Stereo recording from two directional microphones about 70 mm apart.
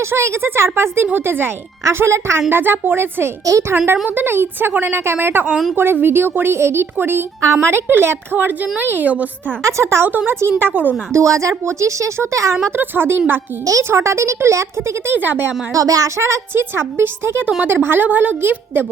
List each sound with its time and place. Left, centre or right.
0.0 s a woman's voice: right
2.5 s a woman's voice: right
3.4 s speech: right
4.1 s a woman's voice: right
9.6 s speech: right
10.1 s a woman's voice: right
11.1 s speech: right
12.7 s a woman's voice: right
13.7 s speech: right
15.1 s a woman's voice: right
15.7 s a woman's voice: right